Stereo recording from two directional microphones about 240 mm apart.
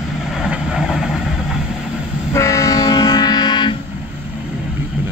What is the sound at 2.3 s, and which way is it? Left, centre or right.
Train, centre.